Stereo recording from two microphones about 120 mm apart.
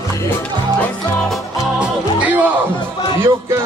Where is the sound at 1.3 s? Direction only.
10° right (ahead or behind).